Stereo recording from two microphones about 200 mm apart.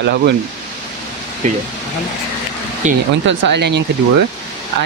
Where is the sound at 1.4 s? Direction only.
40° right (ahead or behind).